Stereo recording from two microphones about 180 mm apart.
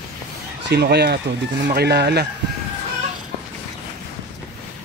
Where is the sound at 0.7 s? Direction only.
65° right (ahead or behind).